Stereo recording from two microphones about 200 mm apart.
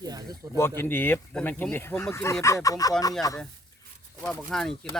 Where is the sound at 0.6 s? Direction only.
10° left (ahead or behind).